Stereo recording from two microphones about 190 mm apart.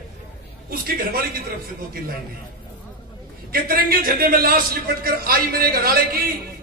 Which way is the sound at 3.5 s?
50° right (ahead or behind).